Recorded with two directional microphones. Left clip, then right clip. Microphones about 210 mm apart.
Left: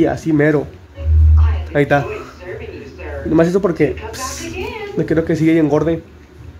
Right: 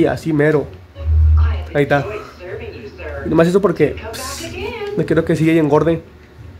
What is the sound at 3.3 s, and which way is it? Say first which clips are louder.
Speech: right 1 dB; 5° right (ahead or behind).